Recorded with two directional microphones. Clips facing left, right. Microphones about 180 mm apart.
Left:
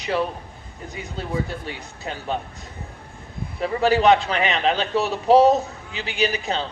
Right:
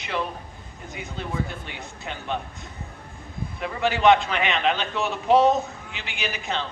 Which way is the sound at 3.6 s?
35° left (ahead or behind).